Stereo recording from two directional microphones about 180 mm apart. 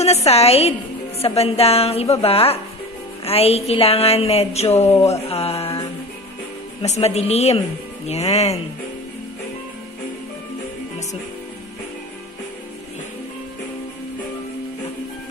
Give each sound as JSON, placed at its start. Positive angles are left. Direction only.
{"t": 0.0, "sound": "speech", "side_deg": 35}
{"t": 6.8, "sound": "speech", "side_deg": 35}